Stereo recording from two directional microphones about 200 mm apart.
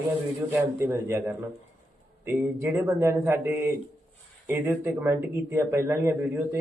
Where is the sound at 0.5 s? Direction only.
10° right (ahead or behind).